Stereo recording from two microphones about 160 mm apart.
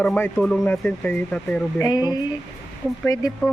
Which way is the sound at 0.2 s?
10° left (ahead or behind).